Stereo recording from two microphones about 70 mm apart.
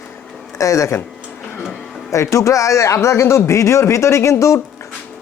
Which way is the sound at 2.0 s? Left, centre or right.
Left.